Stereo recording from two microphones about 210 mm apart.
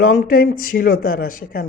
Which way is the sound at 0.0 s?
40° left (ahead or behind).